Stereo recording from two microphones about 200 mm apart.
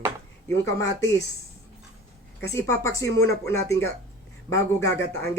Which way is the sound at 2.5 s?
15° left (ahead or behind).